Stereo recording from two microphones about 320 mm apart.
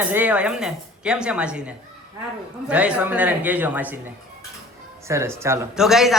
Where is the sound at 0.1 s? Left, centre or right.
Centre.